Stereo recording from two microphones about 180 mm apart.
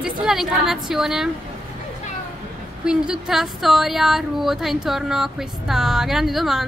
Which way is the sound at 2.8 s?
5° right (ahead or behind).